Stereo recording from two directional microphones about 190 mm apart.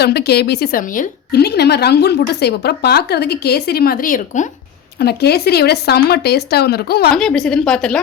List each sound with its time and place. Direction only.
0.0 s a woman's voice: 60° left (ahead or behind)
4.9 s a woman's voice: 60° left (ahead or behind)
7.1 s a woman's voice: 5° left (ahead or behind)